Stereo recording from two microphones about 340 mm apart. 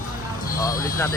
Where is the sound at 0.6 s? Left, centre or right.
Centre.